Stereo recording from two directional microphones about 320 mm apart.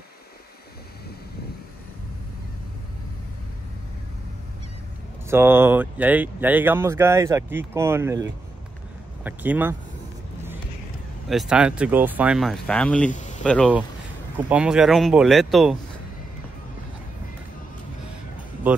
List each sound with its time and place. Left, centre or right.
5.3 s speech: centre
11.2 s speech: centre
13.1 s a sound: left
13.4 s speech: centre